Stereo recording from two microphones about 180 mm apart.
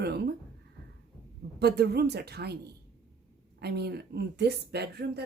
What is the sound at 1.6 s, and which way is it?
A woman's voice, 65° right (ahead or behind).